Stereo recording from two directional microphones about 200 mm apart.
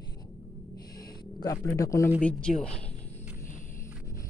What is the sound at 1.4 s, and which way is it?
Speech, 15° left (ahead or behind).